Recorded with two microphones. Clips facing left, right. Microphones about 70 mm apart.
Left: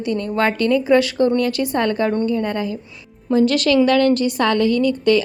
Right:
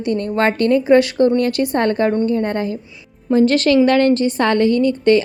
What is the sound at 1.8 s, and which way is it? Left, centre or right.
A woman's voice, right.